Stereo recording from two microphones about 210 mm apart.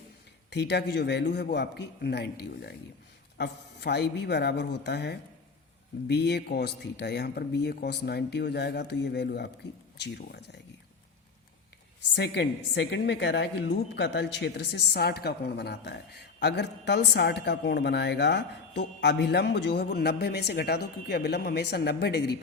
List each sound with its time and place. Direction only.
0.5 s a woman's voice: 50° left (ahead or behind)
12.1 s a woman's voice: 55° left (ahead or behind)